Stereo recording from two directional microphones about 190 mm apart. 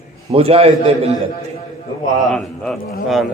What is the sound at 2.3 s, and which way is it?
Speech, 5° left (ahead or behind).